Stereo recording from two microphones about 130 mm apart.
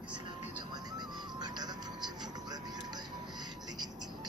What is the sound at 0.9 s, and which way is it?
Music, 35° right (ahead or behind).